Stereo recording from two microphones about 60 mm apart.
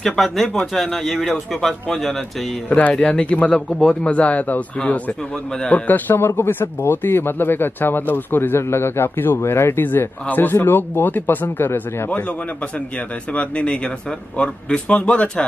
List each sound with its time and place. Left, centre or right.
0.0 s a man's voice: centre
2.7 s a man's voice: centre; by 12.1 s left
13.3 s a man's voice: centre